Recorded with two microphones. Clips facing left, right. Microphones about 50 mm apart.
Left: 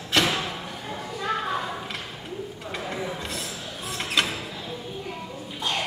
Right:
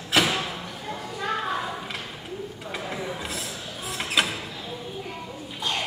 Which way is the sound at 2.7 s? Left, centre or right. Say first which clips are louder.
Left 1 dB; centre.